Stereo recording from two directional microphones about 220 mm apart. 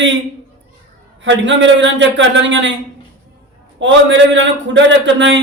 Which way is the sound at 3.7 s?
55° right (ahead or behind).